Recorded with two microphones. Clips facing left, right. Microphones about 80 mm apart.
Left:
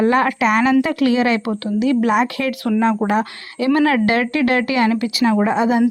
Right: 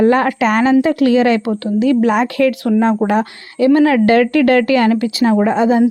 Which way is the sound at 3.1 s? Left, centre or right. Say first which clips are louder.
Right 3 dB; right.